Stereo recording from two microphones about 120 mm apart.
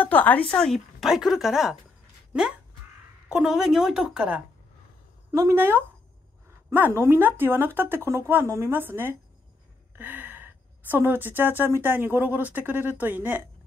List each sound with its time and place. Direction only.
0.0 s speech: 15° left (ahead or behind); by 1.8 s 5° right (ahead or behind)
3.3 s speech: 5° right (ahead or behind)
5.3 s a woman's voice: 25° right (ahead or behind)